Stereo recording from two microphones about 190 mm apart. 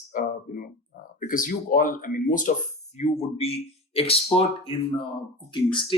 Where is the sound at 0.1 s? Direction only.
45° left (ahead or behind).